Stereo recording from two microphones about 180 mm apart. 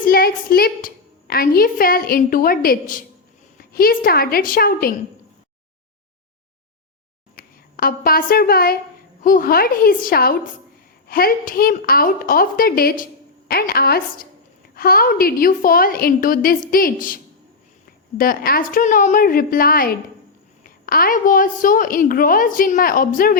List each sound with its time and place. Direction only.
0.0 s a sound: 55° left (ahead or behind)
1.3 s a woman's voice: 55° left (ahead or behind)
7.3 s a woman's voice: 55° left (ahead or behind)
18.2 s a woman's voice: 55° left (ahead or behind)